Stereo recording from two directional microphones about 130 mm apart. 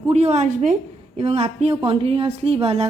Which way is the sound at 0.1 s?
60° right (ahead or behind).